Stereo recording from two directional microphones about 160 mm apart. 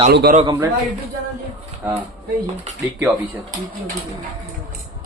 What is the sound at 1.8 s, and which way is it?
Speech, 10° right (ahead or behind).